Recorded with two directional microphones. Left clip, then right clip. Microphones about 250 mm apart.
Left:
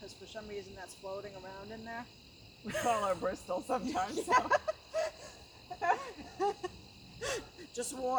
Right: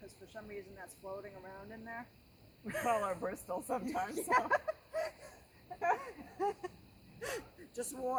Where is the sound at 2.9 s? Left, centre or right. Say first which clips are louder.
Left 3 dB; right.